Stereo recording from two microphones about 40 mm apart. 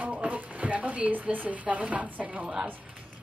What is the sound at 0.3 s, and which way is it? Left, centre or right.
Speech, right.